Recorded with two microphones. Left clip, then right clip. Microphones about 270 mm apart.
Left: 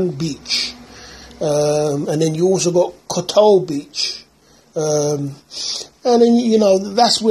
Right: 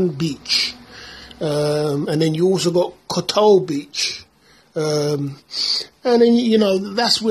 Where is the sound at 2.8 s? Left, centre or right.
Centre.